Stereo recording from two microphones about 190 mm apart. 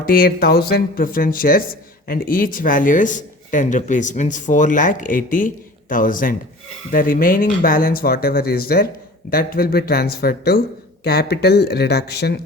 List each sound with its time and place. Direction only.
0.0 s speech: 50° left (ahead or behind)